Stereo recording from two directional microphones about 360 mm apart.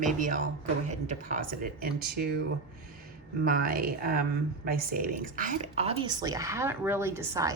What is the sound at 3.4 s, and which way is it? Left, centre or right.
A woman's voice, right.